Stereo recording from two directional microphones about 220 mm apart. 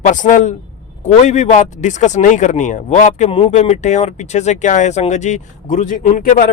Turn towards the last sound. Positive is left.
turn(degrees=40)  # may be behind; listen again after turning